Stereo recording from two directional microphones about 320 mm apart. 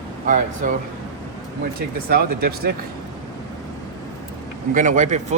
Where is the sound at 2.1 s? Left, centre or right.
Right.